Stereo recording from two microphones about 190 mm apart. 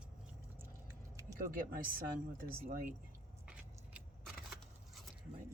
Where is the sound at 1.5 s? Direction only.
50° right (ahead or behind).